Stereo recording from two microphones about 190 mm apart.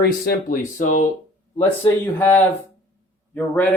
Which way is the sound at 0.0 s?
50° left (ahead or behind).